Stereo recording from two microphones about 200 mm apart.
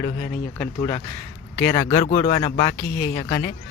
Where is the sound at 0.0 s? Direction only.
15° left (ahead or behind).